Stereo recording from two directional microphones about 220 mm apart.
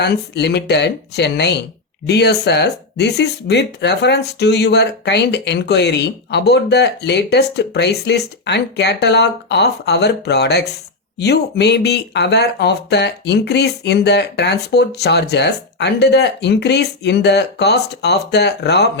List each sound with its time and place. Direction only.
0.0 s speech: 50° left (ahead or behind)